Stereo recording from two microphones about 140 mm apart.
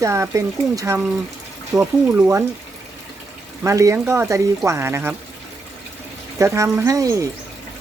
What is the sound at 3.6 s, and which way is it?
Speech, 20° right (ahead or behind).